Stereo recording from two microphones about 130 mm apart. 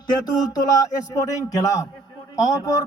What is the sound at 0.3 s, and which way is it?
A man's voice, 30° left (ahead or behind).